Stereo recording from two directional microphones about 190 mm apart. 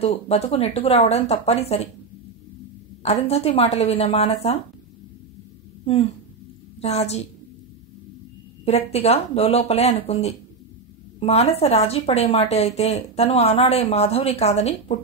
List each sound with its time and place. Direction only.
0.0 s a woman's voice: 30° left (ahead or behind)
3.0 s a woman's voice: 30° left (ahead or behind)
5.9 s a woman's voice: 30° left (ahead or behind)
8.6 s a woman's voice: 35° left (ahead or behind)